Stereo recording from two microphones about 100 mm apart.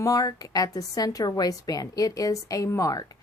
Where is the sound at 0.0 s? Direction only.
35° left (ahead or behind).